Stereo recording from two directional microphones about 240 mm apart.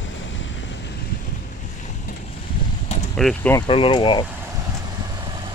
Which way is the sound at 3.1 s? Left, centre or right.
Centre.